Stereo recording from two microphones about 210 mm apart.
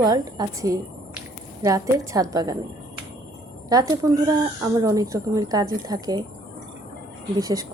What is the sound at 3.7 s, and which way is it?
Speech, 20° right (ahead or behind).